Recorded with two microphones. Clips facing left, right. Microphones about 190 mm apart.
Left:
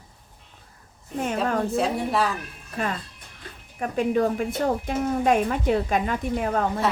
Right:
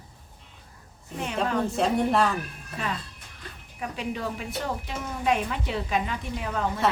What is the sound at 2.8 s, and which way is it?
A woman's voice, 50° left (ahead or behind).